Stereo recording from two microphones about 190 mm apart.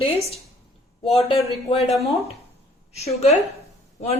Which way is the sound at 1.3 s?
25° left (ahead or behind).